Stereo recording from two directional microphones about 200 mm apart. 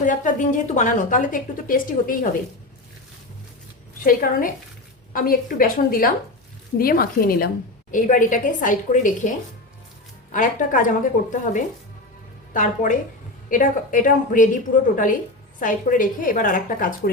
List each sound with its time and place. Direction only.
0.0 s a woman's voice: 40° left (ahead or behind)
4.0 s a woman's voice: 45° left (ahead or behind)
10.3 s a woman's voice: 40° left (ahead or behind)